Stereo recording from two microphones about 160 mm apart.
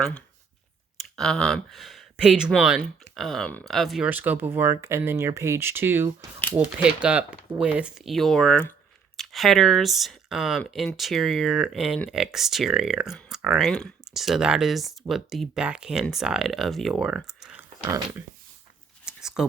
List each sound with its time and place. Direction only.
1.1 s speech: 5° left (ahead or behind)
17.8 s speech: 20° right (ahead or behind)
19.0 s a sound: 5° right (ahead or behind)